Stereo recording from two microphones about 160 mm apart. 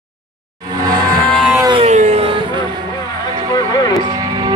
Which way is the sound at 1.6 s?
30° right (ahead or behind).